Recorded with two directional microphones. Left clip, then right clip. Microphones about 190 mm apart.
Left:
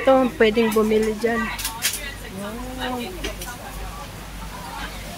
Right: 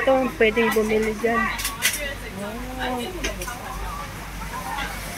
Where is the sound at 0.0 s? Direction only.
20° left (ahead or behind).